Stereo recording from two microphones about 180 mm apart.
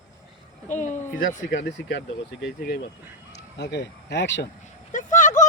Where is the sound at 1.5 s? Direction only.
70° left (ahead or behind).